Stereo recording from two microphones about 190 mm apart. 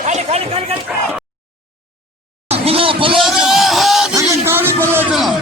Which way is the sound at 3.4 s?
Centre (ahead or behind).